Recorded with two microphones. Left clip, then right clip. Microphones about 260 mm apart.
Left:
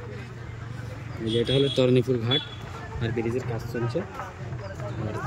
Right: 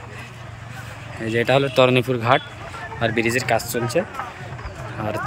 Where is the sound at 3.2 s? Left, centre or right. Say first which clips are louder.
Right 11 dB; right.